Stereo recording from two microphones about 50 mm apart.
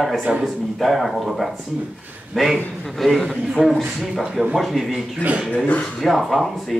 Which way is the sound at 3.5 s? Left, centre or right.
Centre.